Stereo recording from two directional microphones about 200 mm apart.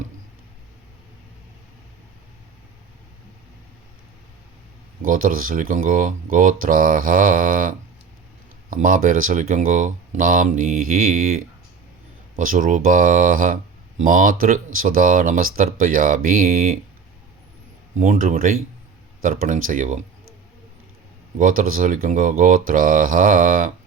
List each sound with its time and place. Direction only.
5.0 s speech: 45° right (ahead or behind)
18.0 s speech: 40° right (ahead or behind)
21.3 s speech: 40° right (ahead or behind)